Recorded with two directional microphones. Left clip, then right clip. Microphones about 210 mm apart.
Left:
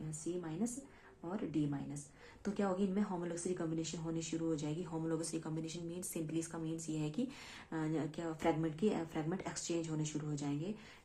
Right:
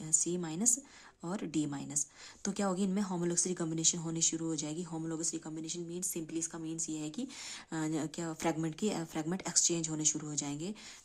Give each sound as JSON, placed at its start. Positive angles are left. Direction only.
{"t": 1.2, "sound": "speech", "side_deg": -35}